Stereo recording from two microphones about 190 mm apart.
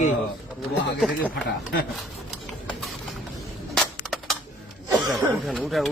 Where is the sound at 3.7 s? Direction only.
Centre (ahead or behind).